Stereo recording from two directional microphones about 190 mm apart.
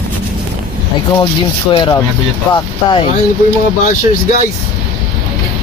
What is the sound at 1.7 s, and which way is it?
Speech, 20° left (ahead or behind).